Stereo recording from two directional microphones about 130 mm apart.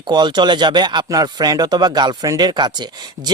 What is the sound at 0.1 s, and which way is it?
Speech, 35° right (ahead or behind).